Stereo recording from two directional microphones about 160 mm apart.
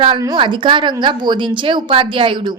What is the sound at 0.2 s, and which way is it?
A woman's voice, 25° right (ahead or behind).